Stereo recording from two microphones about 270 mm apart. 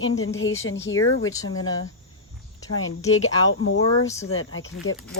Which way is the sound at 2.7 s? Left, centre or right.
Left.